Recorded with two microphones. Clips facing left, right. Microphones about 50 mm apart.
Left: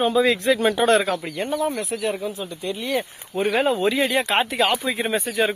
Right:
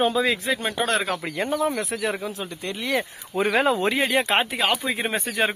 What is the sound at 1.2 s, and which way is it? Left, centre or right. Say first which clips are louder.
Speech: right 1 dB; right.